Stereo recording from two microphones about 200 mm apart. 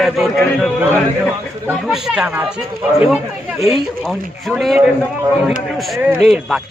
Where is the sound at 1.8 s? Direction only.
Centre (ahead or behind).